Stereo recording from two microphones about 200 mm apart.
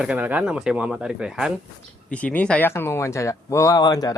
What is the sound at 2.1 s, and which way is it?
Speech, 5° left (ahead or behind).